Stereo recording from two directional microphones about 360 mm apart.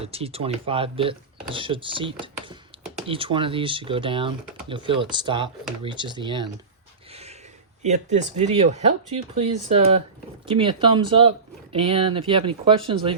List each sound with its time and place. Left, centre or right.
0.0 s speech: centre
7.8 s speech: centre